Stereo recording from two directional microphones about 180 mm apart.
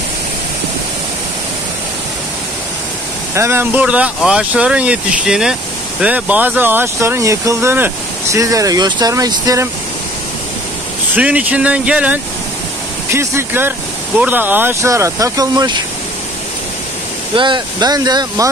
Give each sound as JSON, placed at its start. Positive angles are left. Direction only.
{"t": 3.3, "sound": "speech", "side_deg": -15}
{"t": 11.1, "sound": "speech", "side_deg": -5}
{"t": 17.4, "sound": "speech", "side_deg": -25}